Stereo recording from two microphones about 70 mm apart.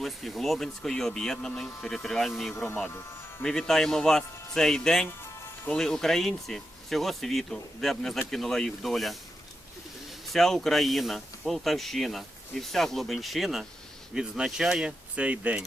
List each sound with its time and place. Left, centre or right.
0.0 s speech: centre
10.2 s speech: centre